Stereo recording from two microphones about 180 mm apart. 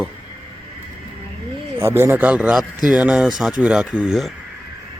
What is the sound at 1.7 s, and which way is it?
Speech, 15° right (ahead or behind).